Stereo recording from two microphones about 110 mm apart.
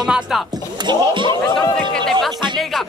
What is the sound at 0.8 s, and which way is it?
Speech, 45° right (ahead or behind).